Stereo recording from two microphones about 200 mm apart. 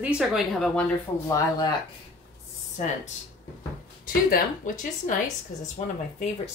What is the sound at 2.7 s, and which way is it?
A woman's voice, 35° left (ahead or behind).